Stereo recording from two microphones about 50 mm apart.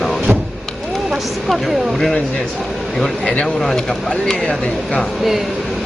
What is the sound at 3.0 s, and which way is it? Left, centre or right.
Speech, left.